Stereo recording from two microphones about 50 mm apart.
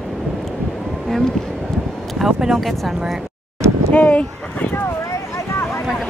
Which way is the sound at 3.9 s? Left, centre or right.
Left.